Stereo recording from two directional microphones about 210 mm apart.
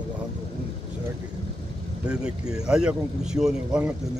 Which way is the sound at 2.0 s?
5° right (ahead or behind).